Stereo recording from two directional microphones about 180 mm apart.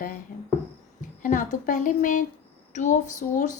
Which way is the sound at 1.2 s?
45° left (ahead or behind).